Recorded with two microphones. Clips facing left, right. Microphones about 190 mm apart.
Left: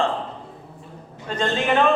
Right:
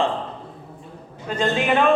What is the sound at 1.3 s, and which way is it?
Speech, 10° right (ahead or behind).